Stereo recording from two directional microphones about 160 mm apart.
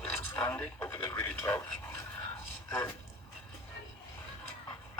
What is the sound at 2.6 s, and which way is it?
Speech, 15° left (ahead or behind).